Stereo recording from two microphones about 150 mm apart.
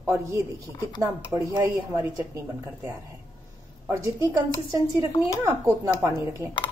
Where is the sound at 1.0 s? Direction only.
20° right (ahead or behind).